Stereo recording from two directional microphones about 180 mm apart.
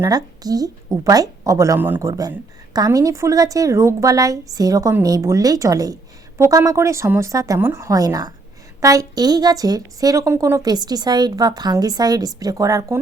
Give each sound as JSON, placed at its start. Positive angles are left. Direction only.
{"t": 0.0, "sound": "a woman's voice", "side_deg": -20}